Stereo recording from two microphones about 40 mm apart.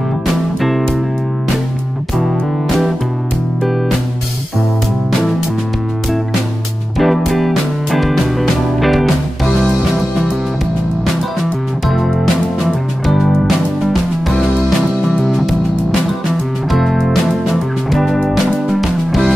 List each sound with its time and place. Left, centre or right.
0.6 s music: centre
7.0 s music: centre
12.6 s music: centre
16.7 s music: centre